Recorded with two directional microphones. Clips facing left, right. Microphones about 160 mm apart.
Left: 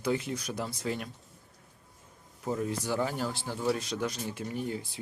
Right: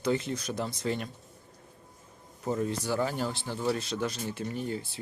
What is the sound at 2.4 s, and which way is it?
Speech, 5° left (ahead or behind).